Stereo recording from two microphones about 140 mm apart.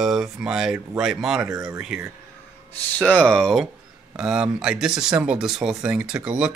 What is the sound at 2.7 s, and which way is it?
Speech, 10° left (ahead or behind).